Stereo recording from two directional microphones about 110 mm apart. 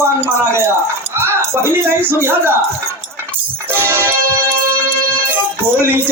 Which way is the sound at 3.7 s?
20° right (ahead or behind).